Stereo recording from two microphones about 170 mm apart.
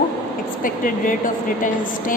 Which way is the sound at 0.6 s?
50° left (ahead or behind).